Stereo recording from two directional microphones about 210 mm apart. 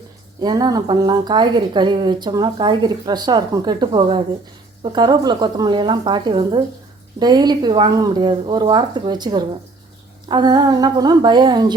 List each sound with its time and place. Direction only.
0.4 s speech: 20° right (ahead or behind)